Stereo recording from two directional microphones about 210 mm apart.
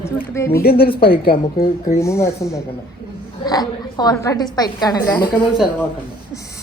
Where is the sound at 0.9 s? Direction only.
25° left (ahead or behind).